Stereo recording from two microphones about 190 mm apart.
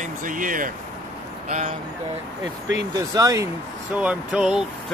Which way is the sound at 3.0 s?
20° right (ahead or behind).